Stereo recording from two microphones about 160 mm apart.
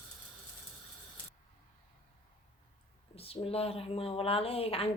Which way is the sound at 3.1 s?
35° left (ahead or behind).